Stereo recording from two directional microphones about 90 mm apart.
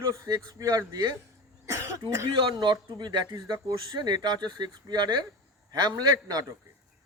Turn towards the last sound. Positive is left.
turn(degrees=-45)  # may be behind; listen again after turning